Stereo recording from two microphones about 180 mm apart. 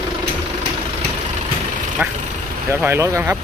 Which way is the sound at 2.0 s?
10° right (ahead or behind).